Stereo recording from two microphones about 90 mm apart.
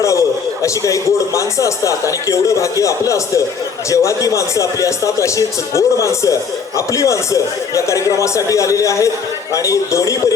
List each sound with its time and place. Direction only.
0.0 s a man's voice: 35° left (ahead or behind)